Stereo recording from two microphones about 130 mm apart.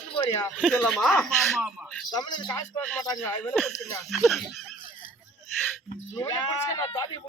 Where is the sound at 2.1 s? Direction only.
35° left (ahead or behind).